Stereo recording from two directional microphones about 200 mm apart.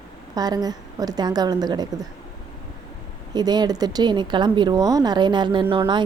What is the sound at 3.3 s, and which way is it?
A woman's voice, 20° right (ahead or behind).